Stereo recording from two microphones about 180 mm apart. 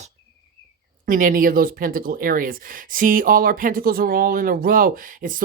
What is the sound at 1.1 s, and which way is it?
Speech, 50° right (ahead or behind).